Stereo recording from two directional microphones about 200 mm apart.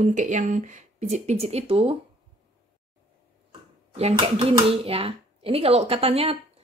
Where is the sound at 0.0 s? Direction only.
40° right (ahead or behind).